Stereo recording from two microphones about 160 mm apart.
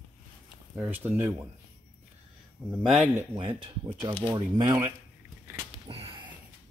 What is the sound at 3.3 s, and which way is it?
Speech, 30° right (ahead or behind).